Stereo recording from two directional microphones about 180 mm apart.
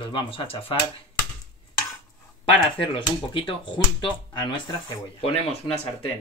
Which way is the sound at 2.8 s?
30° left (ahead or behind).